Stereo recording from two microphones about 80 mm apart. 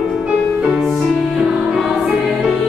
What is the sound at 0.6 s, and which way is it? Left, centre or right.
Music, centre.